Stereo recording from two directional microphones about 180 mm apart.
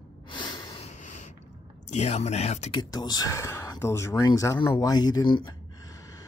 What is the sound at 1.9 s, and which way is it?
Speech, 40° left (ahead or behind).